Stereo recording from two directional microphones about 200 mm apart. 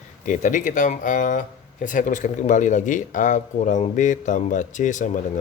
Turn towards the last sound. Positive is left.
turn(degrees=35)  # may be behind; listen again after turning